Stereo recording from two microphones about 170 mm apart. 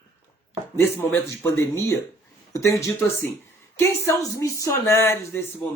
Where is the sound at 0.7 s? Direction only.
15° left (ahead or behind).